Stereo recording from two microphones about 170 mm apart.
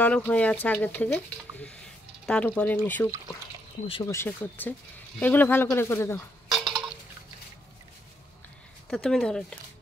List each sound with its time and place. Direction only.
0.0 s speech: 10° left (ahead or behind)
6.5 s a sound: centre (ahead or behind)
8.9 s speech: 5° left (ahead or behind)